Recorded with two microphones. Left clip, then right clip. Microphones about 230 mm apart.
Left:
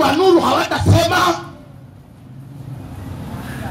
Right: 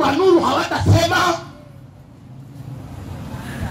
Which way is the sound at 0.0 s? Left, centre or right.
Left.